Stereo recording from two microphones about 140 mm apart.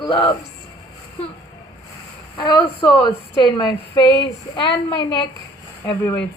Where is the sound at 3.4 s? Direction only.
30° left (ahead or behind).